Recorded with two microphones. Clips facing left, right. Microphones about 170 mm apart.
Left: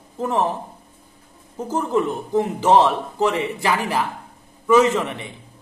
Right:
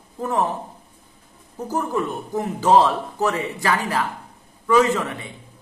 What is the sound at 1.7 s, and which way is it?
Speech, 20° left (ahead or behind).